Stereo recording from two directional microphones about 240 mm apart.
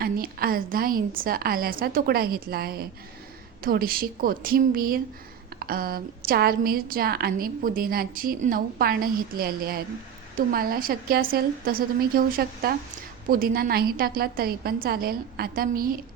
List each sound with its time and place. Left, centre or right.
0.0 s a woman's voice: right